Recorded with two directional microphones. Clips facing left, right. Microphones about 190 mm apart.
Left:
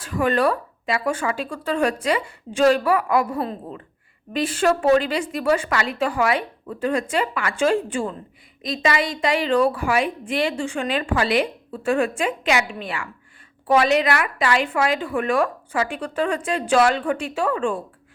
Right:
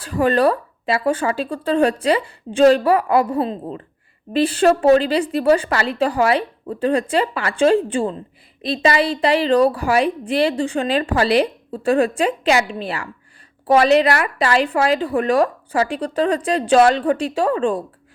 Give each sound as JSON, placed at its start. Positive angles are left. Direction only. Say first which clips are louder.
{"t": 0.0, "sound": "a woman's voice", "louder": "right 4 dB", "side_deg": -35}